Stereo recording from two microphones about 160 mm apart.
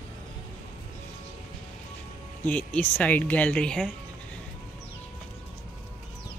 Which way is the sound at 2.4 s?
10° left (ahead or behind).